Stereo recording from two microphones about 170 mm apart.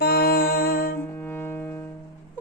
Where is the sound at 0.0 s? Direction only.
65° left (ahead or behind).